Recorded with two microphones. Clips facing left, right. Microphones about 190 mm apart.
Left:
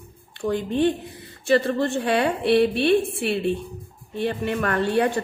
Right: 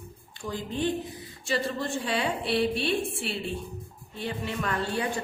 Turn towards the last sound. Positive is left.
turn(degrees=65)  # may be behind; listen again after turning